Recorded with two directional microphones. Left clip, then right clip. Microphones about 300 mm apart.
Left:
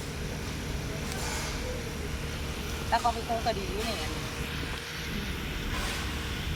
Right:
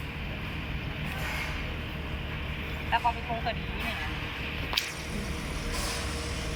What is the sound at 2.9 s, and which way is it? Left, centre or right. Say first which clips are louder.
Speech: even; centre.